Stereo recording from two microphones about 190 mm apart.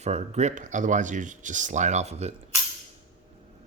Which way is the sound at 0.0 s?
35° right (ahead or behind).